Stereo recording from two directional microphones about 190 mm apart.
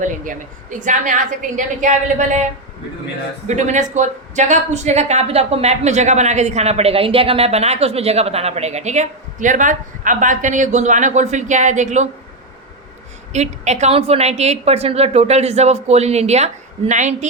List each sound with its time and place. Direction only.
0.0 s a woman's voice: 40° right (ahead or behind)
3.4 s a woman's voice: 40° right (ahead or behind)
13.3 s a woman's voice: 35° right (ahead or behind)